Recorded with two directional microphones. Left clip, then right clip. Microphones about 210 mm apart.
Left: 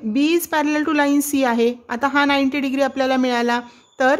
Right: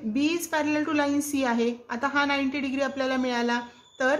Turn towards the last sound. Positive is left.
turn(degrees=45)  # may be behind; listen again after turning